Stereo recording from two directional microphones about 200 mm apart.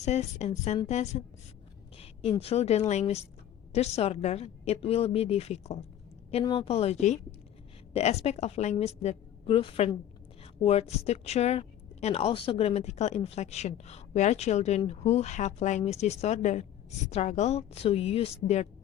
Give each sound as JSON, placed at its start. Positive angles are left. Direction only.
{"t": 0.0, "sound": "a woman's voice", "side_deg": 35}